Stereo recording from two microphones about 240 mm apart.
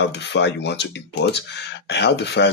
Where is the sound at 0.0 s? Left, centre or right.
Left.